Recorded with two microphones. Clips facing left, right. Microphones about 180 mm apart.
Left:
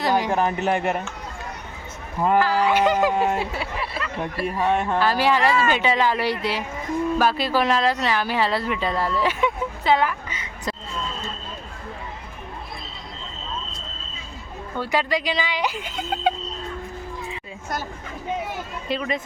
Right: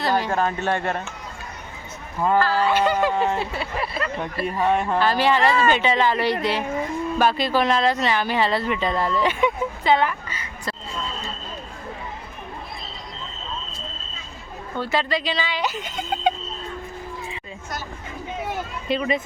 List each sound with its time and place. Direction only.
0.0 s speech: 15° left (ahead or behind)
2.2 s speech: 15° left (ahead or behind)
3.8 s speech: 45° right (ahead or behind)
4.2 s speech: 5° left (ahead or behind)
10.2 s a sound: 20° left (ahead or behind)
14.8 s speech: 10° left (ahead or behind)
18.9 s speech: centre (ahead or behind)